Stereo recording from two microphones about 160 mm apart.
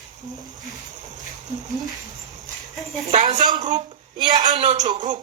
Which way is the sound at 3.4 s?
25° right (ahead or behind).